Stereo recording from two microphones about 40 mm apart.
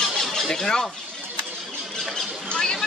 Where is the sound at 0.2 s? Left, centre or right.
Centre.